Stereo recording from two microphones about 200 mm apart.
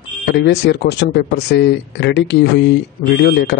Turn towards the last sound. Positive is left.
turn(degrees=55)  # may be behind; listen again after turning